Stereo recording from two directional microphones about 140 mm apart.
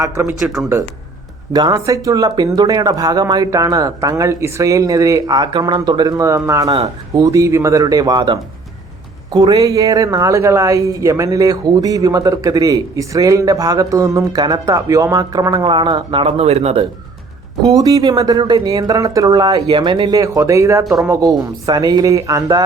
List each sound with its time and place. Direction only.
0.0 s speech: 20° right (ahead or behind)
0.3 s speech: 5° right (ahead or behind)
1.5 s speech: 25° right (ahead or behind)
6.7 s speech: 45° right (ahead or behind)
7.1 s speech: 25° right (ahead or behind)
16.2 s speech: 50° right (ahead or behind)
17.7 s speech: 25° right (ahead or behind)